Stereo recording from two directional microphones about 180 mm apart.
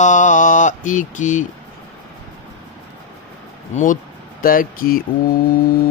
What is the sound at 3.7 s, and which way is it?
Speech, 45° left (ahead or behind).